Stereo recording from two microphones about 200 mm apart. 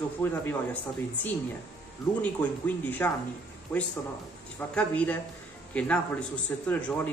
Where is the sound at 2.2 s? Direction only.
10° left (ahead or behind).